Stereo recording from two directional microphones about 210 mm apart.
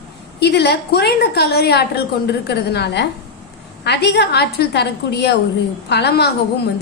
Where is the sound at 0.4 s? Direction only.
50° left (ahead or behind).